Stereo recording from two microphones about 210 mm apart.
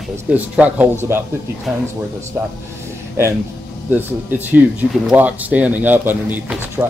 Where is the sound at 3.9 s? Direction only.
10° right (ahead or behind).